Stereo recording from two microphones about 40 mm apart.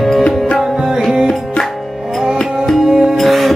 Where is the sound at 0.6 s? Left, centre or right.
Centre.